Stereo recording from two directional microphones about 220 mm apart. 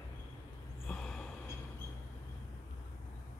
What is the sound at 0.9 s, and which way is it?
Gasp, centre (ahead or behind).